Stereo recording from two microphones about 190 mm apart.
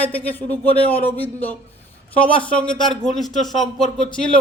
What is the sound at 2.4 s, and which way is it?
Speech, 5° left (ahead or behind).